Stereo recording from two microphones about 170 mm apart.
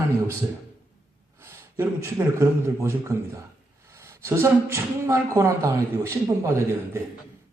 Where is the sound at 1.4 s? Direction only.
15° right (ahead or behind).